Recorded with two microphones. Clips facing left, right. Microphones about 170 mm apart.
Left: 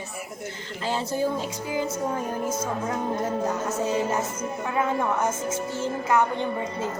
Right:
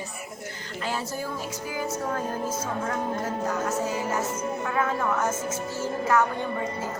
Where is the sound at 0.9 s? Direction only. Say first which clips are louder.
Left 6 dB; 25° left (ahead or behind).